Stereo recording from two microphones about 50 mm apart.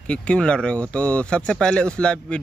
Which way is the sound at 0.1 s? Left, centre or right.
Left.